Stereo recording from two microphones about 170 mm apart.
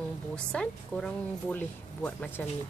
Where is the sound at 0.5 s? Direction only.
5° left (ahead or behind).